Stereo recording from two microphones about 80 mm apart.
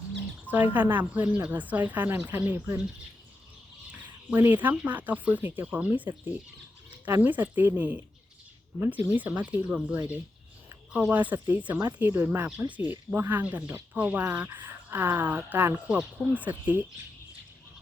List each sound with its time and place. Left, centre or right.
0.5 s speech: right
4.4 s speech: right
11.1 s speech: right
16.0 s speech: centre
16.3 s speech: centre